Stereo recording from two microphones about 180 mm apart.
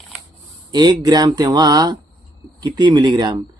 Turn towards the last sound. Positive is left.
turn(degrees=-25)  # may be behind; listen again after turning